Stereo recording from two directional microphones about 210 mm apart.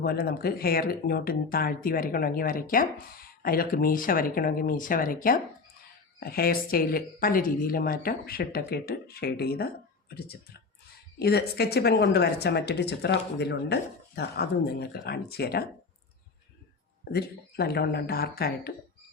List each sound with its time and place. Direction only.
0.0 s speech: 50° left (ahead or behind)
17.1 s speech: 50° left (ahead or behind)